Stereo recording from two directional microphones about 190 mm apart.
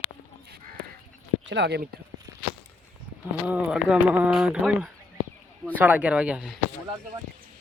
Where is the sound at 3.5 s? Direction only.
5° right (ahead or behind).